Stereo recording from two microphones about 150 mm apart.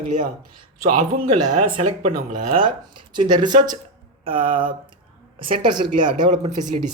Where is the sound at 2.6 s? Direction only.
30° right (ahead or behind).